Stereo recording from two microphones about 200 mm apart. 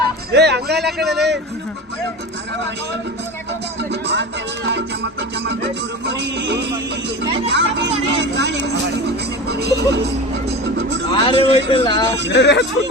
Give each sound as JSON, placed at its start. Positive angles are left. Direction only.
{"t": 0.3, "sound": "speech", "side_deg": -55}
{"t": 0.9, "sound": "a man's voice", "side_deg": 0}
{"t": 4.0, "sound": "speech", "side_deg": -60}
{"t": 11.1, "sound": "speech", "side_deg": 25}
{"t": 12.3, "sound": "speech", "side_deg": 60}